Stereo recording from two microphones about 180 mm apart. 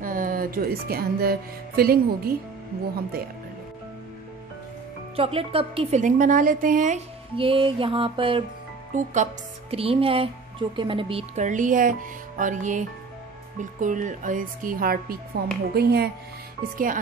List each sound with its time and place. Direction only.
0.0 s speech: 50° right (ahead or behind)
5.1 s a woman's voice: 30° right (ahead or behind)
7.3 s music: 30° right (ahead or behind)
8.9 s a woman's voice: 40° right (ahead or behind); by 16.1 s 60° right (ahead or behind)
16.7 s speech: 50° right (ahead or behind)